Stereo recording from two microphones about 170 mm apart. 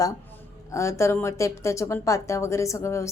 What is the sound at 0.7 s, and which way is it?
A woman's voice, 15° left (ahead or behind).